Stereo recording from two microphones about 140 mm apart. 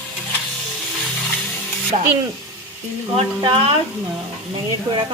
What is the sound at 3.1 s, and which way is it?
Speech, 45° right (ahead or behind).